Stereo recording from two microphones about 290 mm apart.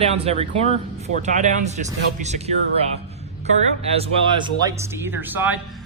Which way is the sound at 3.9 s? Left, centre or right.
Centre.